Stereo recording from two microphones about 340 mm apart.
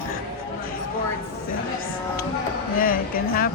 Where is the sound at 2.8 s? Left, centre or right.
Left.